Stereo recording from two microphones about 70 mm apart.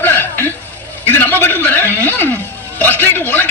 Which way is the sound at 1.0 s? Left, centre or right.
Left.